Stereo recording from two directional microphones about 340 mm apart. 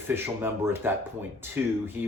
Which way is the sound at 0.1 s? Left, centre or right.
Centre.